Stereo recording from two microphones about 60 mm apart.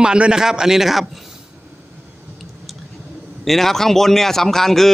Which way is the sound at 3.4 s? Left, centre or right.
Centre.